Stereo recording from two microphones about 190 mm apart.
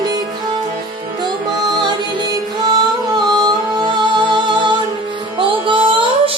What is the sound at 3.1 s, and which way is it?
Music, 20° right (ahead or behind).